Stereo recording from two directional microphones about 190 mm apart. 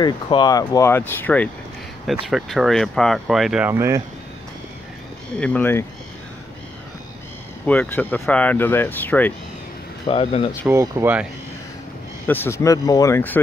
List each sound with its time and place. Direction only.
0.0 s speech: 20° left (ahead or behind); by 3.7 s 5° right (ahead or behind)
3.7 s speech: 15° right (ahead or behind)
5.4 s speech: 10° left (ahead or behind)
7.6 s speech: 5° left (ahead or behind)
10.0 s speech: 30° left (ahead or behind)
10.7 s speech: 15° right (ahead or behind)
12.3 s speech: 15° left (ahead or behind)